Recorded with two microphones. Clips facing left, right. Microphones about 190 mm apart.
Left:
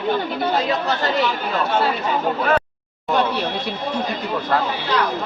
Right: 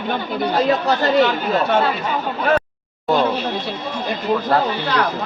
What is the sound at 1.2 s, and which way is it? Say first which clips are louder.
Speech: right 5 dB; 60° right (ahead or behind).